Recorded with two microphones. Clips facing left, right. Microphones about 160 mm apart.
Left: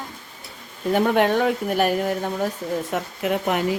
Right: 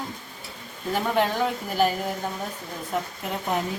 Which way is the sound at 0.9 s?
65° left (ahead or behind).